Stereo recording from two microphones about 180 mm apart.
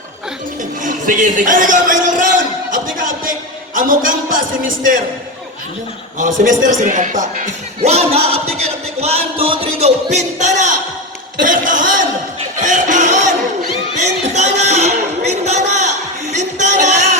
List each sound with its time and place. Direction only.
0.8 s speech: 45° right (ahead or behind)
2.7 s music: 50° right (ahead or behind)
3.8 s a man's voice: 50° right (ahead or behind)
6.1 s a man's voice: 45° right (ahead or behind)
12.5 s music: 45° right (ahead or behind)
14.0 s a sound: 40° right (ahead or behind)
16.3 s music: 40° right (ahead or behind)